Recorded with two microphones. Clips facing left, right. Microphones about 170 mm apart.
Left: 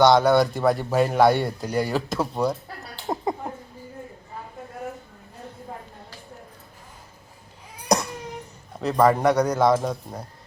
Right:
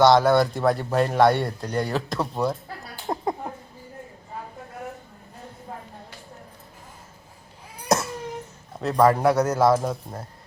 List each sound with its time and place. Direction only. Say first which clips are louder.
0.0 s speech: even; centre (ahead or behind)
3.1 s a sound: even; centre (ahead or behind)
7.9 s baby cry: even; 5° right (ahead or behind)
8.8 s speech: even; centre (ahead or behind)